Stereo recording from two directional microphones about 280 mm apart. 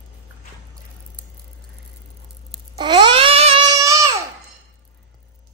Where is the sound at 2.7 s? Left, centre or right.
Centre.